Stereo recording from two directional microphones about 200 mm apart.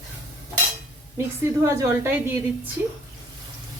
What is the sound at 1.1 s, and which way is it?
A woman's voice, 15° right (ahead or behind).